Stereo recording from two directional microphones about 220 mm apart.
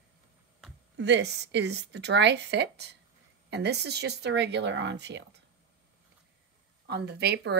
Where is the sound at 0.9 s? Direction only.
50° right (ahead or behind).